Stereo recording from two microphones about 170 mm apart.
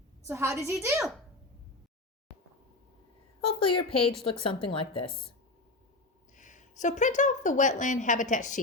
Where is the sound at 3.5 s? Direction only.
30° left (ahead or behind).